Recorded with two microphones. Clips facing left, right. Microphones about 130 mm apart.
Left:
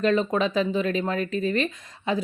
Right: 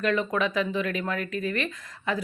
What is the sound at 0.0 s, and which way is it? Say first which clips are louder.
Speech: left 3 dB; 25° left (ahead or behind).